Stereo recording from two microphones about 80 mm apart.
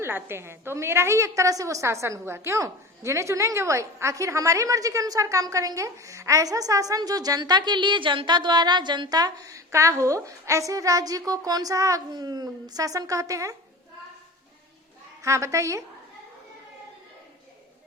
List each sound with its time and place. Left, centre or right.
0.0 s a woman's voice: right
12.1 s a woman's voice: right
15.2 s a woman's voice: right